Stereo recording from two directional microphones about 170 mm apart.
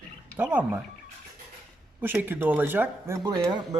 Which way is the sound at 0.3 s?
10° right (ahead or behind).